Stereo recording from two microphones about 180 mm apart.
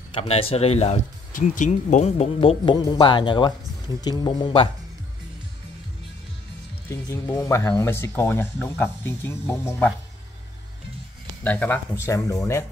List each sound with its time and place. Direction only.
0.1 s speech: 35° left (ahead or behind)
6.9 s speech: 15° left (ahead or behind)
11.4 s speech: 10° left (ahead or behind)